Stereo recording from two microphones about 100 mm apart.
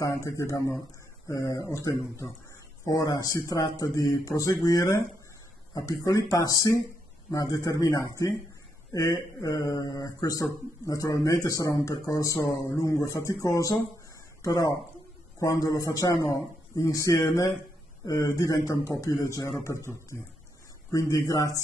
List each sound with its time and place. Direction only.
0.1 s a man's voice: 30° left (ahead or behind)
20.9 s a man's voice: 35° left (ahead or behind)